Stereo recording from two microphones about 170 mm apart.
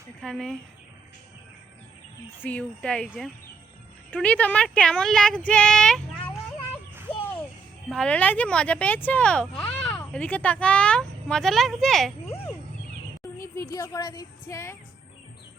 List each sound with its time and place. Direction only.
0.2 s speech: 5° left (ahead or behind)
2.4 s speech: 10° left (ahead or behind)
4.1 s speech: 5° left (ahead or behind)
7.9 s speech: 5° left (ahead or behind)
13.6 s a woman's voice: 20° left (ahead or behind)